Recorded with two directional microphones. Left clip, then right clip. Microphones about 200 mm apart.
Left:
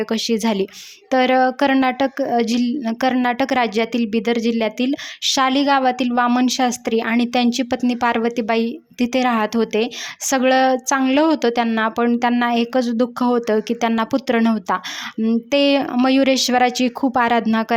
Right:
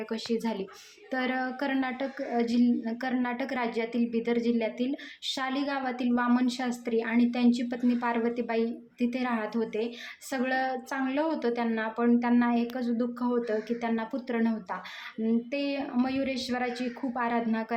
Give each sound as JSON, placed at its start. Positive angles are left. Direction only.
{"t": 0.0, "sound": "a woman's voice", "side_deg": 50}